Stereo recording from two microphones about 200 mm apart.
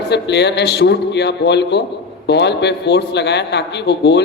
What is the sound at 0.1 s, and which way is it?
A man's voice, 60° left (ahead or behind).